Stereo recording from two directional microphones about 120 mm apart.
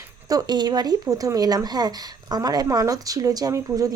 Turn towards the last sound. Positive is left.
turn(degrees=-30)  # may be behind; listen again after turning